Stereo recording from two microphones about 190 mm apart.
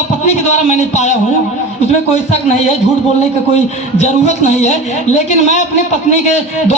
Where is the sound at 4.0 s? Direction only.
35° left (ahead or behind).